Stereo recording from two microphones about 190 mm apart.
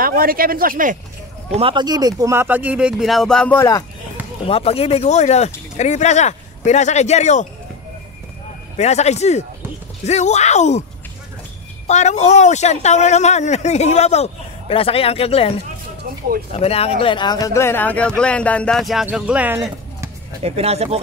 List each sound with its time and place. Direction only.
0.0 s speech: 50° right (ahead or behind)
1.5 s speech: 30° right (ahead or behind); by 3.8 s 15° left (ahead or behind)
4.5 s speech: 30° left (ahead or behind)
8.7 s speech: 35° left (ahead or behind)
11.9 s speech: 40° left (ahead or behind)
16.5 s speech: 30° left (ahead or behind); by 20.1 s 15° right (ahead or behind)
20.4 s speech: 35° right (ahead or behind)